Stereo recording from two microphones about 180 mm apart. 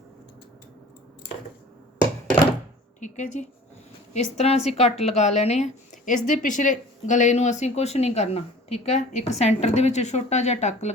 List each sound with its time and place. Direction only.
3.0 s a woman's voice: 40° left (ahead or behind)